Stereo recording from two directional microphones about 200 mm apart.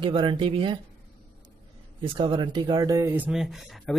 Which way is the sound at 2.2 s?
25° right (ahead or behind).